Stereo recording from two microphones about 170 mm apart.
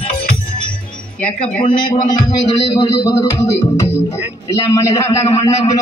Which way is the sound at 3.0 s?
15° left (ahead or behind).